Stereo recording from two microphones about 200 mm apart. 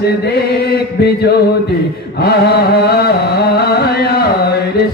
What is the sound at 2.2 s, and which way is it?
Music, 55° left (ahead or behind).